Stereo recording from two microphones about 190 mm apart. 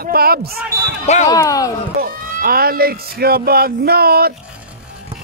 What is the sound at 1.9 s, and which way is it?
Speech, 50° right (ahead or behind).